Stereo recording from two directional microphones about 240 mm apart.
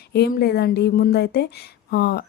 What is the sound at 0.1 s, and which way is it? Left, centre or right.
A woman's voice, left.